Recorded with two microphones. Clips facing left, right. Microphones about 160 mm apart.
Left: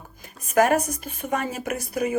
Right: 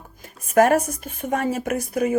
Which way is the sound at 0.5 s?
50° right (ahead or behind).